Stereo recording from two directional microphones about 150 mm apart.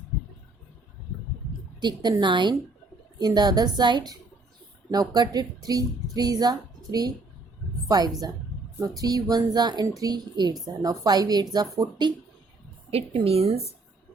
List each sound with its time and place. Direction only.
1.8 s a woman's voice: 30° right (ahead or behind)
12.9 s a woman's voice: 40° right (ahead or behind)